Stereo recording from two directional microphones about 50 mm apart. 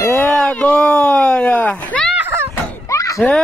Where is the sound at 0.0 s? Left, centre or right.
Left.